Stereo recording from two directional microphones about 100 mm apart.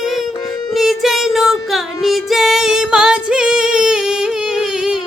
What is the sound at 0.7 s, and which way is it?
Music, 5° right (ahead or behind).